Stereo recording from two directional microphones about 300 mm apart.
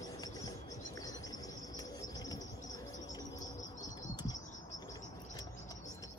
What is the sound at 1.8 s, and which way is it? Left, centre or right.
Cricket, centre.